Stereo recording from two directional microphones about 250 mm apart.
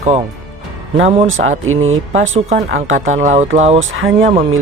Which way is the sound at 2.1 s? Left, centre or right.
Right.